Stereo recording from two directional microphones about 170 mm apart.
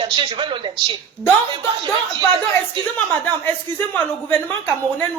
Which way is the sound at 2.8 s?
25° right (ahead or behind).